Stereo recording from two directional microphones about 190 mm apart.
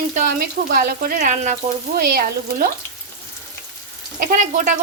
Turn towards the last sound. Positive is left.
turn(degrees=-50)  # may be behind; listen again after turning